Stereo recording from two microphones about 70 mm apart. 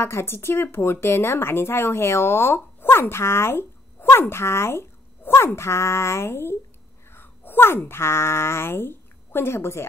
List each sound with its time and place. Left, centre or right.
0.0 s speech: left